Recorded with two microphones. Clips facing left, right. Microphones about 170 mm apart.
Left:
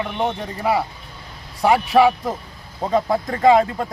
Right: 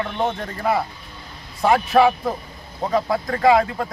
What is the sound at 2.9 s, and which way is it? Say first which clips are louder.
Speech: left 2 dB; 25° left (ahead or behind).